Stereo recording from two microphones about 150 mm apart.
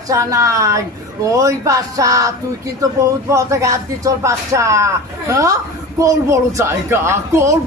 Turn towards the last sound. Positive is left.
turn(degrees=-20)  # may be behind; listen again after turning